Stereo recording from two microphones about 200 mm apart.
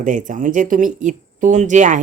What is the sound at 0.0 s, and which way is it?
Speech, 40° right (ahead or behind).